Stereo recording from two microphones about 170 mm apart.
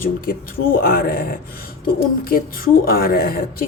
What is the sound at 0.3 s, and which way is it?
Speech, 60° left (ahead or behind).